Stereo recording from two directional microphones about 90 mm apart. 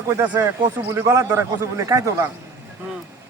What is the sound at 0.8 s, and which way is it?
A man's voice, 30° right (ahead or behind).